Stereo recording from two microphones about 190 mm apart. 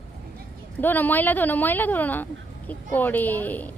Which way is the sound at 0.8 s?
10° left (ahead or behind).